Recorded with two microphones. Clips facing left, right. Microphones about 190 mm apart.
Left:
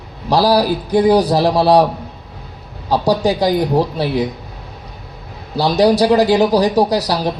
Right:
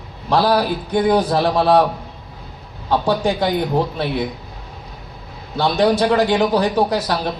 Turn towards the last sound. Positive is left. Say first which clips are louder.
# left 3 dB
turn(degrees=35)  # may be behind; listen again after turning